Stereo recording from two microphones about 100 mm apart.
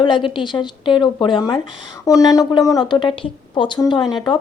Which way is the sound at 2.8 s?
55° left (ahead or behind).